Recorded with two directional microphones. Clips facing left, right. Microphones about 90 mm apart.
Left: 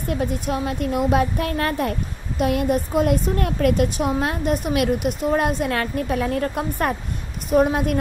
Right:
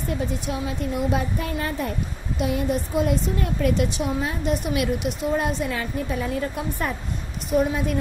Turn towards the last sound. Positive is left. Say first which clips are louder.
# left 4 dB
turn(degrees=55)  # may be behind; listen again after turning